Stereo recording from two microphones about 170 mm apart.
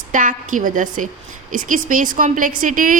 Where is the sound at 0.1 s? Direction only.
50° right (ahead or behind).